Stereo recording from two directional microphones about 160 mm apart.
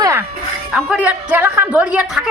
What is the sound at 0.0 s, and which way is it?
Music, 20° right (ahead or behind).